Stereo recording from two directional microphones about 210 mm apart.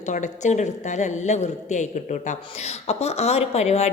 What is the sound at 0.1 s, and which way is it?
A woman's voice, 35° left (ahead or behind).